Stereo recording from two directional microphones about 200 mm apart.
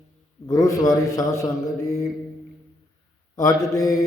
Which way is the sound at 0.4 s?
15° left (ahead or behind).